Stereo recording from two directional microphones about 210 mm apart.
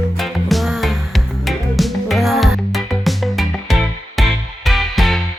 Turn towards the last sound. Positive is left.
turn(degrees=0)  # may be behind; listen again after turning